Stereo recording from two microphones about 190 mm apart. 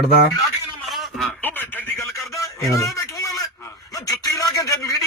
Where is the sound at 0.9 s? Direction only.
Centre (ahead or behind).